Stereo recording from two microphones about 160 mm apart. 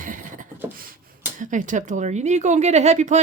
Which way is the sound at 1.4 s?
55° right (ahead or behind).